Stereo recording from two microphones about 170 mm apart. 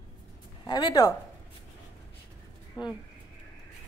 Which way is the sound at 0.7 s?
25° left (ahead or behind).